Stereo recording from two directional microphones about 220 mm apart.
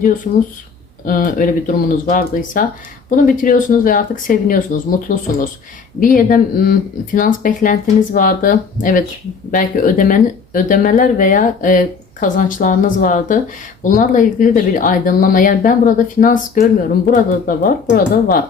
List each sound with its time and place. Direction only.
0.3 s speech: 40° left (ahead or behind)